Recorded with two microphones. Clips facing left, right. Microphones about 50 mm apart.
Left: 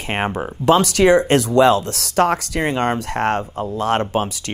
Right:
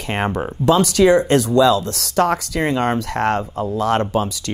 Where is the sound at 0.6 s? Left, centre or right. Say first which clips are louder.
Even; left.